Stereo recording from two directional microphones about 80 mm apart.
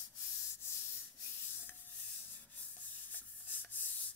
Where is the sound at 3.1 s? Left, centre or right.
Left.